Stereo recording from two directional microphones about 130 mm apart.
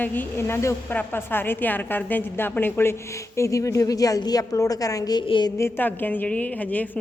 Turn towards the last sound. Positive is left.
turn(degrees=10)  # may be behind; listen again after turning